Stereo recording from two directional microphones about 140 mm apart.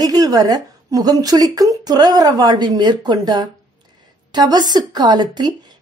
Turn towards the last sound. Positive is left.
turn(degrees=-30)  # may be behind; listen again after turning